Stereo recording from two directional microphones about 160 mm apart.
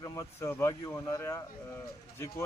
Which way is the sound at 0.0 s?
20° left (ahead or behind).